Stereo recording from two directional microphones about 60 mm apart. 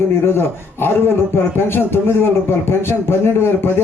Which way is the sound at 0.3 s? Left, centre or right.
Left.